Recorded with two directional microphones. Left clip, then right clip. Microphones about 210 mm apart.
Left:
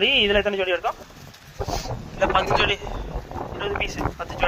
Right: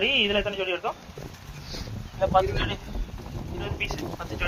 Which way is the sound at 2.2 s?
40° left (ahead or behind).